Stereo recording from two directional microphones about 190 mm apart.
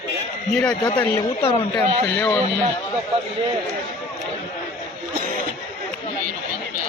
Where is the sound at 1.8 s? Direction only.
10° left (ahead or behind).